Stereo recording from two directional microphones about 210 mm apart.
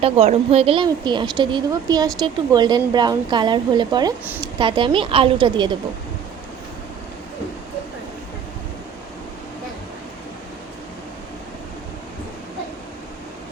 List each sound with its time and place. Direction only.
0.0 s speech: 30° right (ahead or behind)